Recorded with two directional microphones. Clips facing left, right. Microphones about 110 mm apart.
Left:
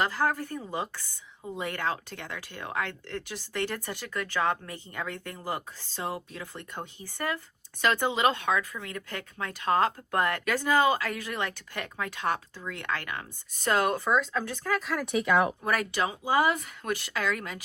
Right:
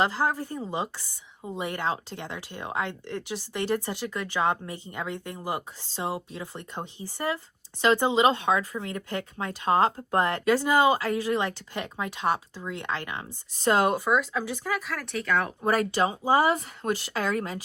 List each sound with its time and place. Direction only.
0.0 s a woman's voice: 20° right (ahead or behind)
14.8 s speech: 5° left (ahead or behind)
15.6 s speech: 35° right (ahead or behind)